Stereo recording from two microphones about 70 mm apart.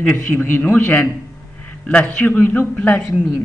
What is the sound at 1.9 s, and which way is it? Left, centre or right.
Speech, centre.